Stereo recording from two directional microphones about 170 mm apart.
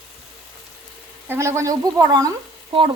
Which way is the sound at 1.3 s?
15° right (ahead or behind).